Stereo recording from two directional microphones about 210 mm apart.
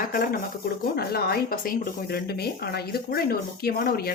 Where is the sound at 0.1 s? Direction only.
45° left (ahead or behind).